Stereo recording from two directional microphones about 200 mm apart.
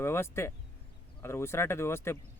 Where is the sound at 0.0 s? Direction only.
15° left (ahead or behind).